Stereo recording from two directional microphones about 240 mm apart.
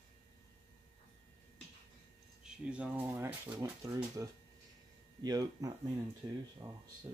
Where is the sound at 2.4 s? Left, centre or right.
Centre.